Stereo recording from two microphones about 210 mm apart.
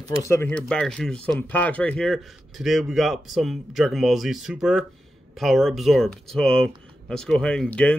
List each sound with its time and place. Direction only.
0.2 s speech: 10° left (ahead or behind)